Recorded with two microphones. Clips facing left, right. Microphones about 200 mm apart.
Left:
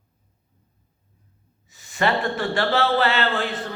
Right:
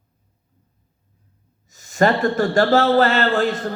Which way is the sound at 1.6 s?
40° right (ahead or behind).